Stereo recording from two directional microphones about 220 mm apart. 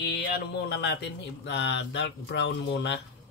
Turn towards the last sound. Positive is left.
turn(degrees=50)  # may be behind; listen again after turning